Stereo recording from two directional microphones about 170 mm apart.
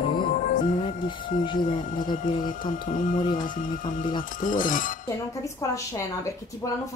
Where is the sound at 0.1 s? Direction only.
50° left (ahead or behind).